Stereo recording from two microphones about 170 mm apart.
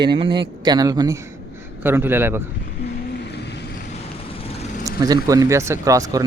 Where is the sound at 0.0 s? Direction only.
30° right (ahead or behind); by 2.5 s 15° right (ahead or behind).